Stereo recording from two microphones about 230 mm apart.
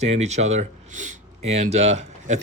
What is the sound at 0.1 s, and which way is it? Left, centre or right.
Speech, right.